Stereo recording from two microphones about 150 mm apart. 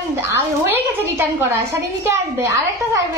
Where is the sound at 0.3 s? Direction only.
15° right (ahead or behind).